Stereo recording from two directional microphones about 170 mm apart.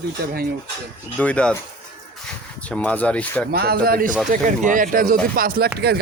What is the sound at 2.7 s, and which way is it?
Speech, 10° left (ahead or behind).